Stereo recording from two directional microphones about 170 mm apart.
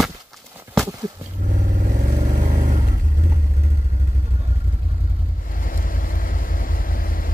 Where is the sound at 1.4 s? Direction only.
40° right (ahead or behind).